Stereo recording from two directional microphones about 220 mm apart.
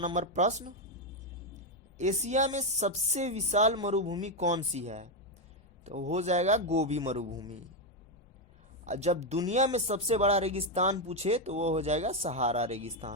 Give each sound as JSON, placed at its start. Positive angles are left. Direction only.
{"t": 0.0, "sound": "speech", "side_deg": -35}
{"t": 2.0, "sound": "speech", "side_deg": -30}
{"t": 7.3, "sound": "a man's voice", "side_deg": -15}
{"t": 8.8, "sound": "speech", "side_deg": -30}